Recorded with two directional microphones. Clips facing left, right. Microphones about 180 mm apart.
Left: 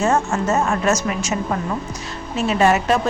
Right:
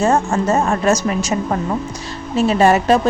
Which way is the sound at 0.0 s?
30° right (ahead or behind).